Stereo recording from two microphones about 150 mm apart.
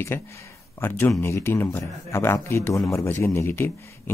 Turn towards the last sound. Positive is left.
turn(degrees=15)  # may be behind; listen again after turning